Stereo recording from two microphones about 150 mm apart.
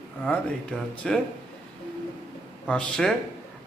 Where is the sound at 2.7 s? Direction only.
5° left (ahead or behind).